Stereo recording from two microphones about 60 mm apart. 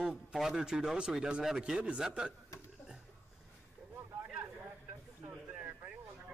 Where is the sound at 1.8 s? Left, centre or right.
Centre.